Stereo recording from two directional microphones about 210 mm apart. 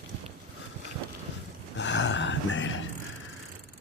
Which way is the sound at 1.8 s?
60° left (ahead or behind).